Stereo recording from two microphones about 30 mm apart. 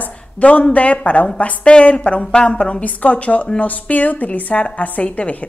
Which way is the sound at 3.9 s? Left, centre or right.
Left.